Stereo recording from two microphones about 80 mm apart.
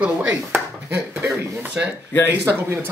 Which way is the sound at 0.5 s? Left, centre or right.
Right.